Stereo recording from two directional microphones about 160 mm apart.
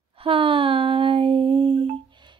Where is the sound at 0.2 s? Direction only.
35° right (ahead or behind).